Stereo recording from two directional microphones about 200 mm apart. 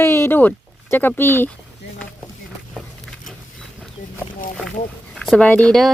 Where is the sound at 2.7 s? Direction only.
5° left (ahead or behind).